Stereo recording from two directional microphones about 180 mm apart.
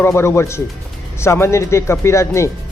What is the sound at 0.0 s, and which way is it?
Speech, 15° left (ahead or behind).